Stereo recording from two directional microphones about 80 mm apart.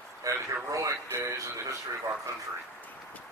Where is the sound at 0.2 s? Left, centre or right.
Right.